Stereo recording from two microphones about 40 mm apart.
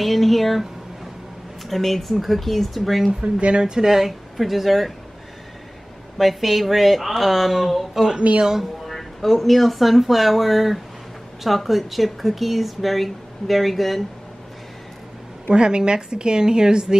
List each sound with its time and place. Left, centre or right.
0.0 s speech: centre
1.7 s speech: centre
3.2 s speech: right; by 4.9 s centre
6.1 s speech: centre
8.8 s speech: centre
15.5 s a woman's voice: right